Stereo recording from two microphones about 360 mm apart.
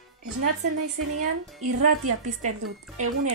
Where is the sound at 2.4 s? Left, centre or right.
Centre.